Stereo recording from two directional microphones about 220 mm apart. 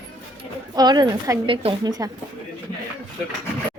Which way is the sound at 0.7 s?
20° right (ahead or behind).